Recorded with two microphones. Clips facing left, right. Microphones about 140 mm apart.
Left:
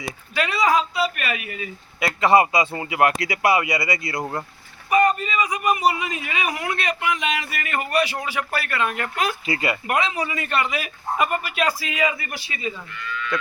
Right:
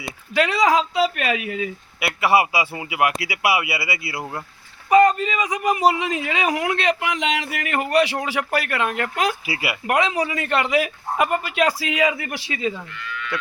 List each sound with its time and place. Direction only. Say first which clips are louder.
0.3 s a man's voice: right 2 dB; 85° right
2.0 s speech: left 2 dB; 10° right (ahead or behind)
4.9 s a man's voice: right 4 dB; 90° right
9.5 s speech: left 3 dB; 10° right (ahead or behind)
9.8 s speech: right 3 dB; 80° right
11.5 s a man's voice: right 3 dB; 90° right